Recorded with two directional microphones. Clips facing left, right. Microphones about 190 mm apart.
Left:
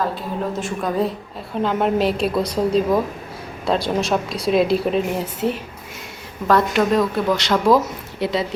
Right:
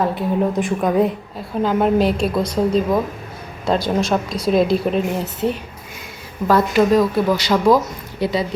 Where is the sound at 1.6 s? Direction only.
Centre (ahead or behind).